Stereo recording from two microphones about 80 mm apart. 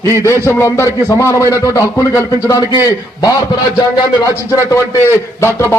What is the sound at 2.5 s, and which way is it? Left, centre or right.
Speech, left.